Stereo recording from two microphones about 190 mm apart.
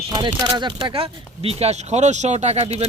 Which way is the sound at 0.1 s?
25° right (ahead or behind).